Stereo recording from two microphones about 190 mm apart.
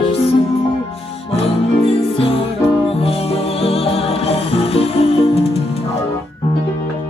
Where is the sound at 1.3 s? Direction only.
30° left (ahead or behind).